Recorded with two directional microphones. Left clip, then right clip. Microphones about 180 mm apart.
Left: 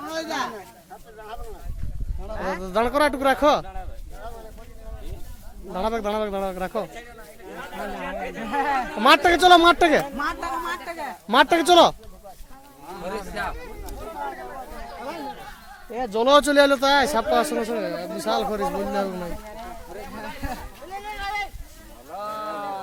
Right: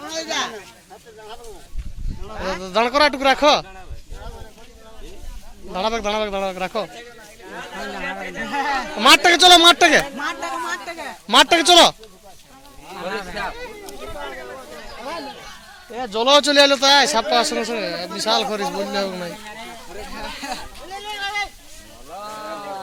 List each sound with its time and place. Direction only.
0.1 s a sound: 65° left (ahead or behind)
2.3 s speech: 60° left (ahead or behind)
2.6 s a man's voice: 10° left (ahead or behind)
5.7 s a man's voice: 10° left (ahead or behind)
8.4 s speech: 45° left (ahead or behind)
9.0 s a man's voice: 10° left (ahead or behind)
10.2 s a sound: 55° left (ahead or behind)
11.3 s a man's voice: 5° left (ahead or behind)
15.9 s a man's voice: 25° left (ahead or behind); by 19.3 s 10° left (ahead or behind)
20.1 s goat: 45° left (ahead or behind)
21.1 s a sound: 40° right (ahead or behind)